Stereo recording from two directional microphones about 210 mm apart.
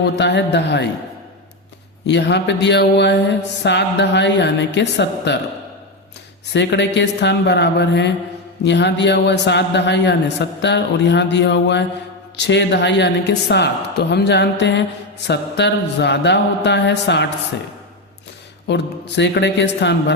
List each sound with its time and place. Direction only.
0.2 s mantra: 55° left (ahead or behind)
2.0 s mantra: 55° left (ahead or behind)
6.5 s mantra: 55° left (ahead or behind)
18.7 s mantra: 55° left (ahead or behind)